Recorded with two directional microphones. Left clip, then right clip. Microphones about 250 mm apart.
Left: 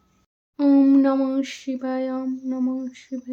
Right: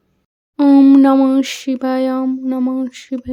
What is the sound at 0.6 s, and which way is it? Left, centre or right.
Speech, right.